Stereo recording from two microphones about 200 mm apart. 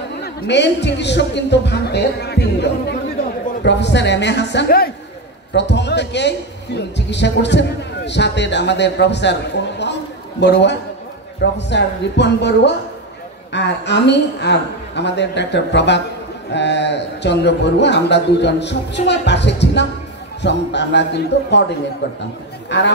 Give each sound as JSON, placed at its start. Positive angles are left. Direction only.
{"t": 0.2, "sound": "a man's voice", "side_deg": 55}